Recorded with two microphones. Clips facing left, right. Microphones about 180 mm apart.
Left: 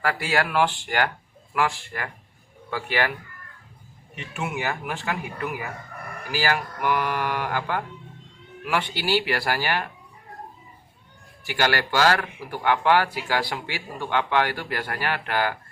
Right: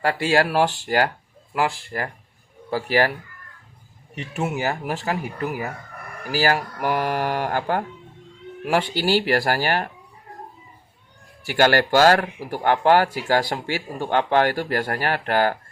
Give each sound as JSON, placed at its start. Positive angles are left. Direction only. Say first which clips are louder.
{"t": 0.0, "sound": "speech", "louder": "right 5 dB", "side_deg": -30}
{"t": 11.4, "sound": "speech", "louder": "right 6 dB", "side_deg": -50}